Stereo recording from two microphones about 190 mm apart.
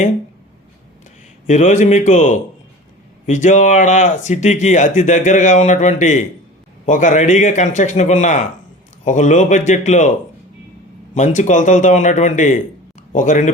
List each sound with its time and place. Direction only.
1.5 s speech: 40° left (ahead or behind)
11.1 s speech: 40° left (ahead or behind)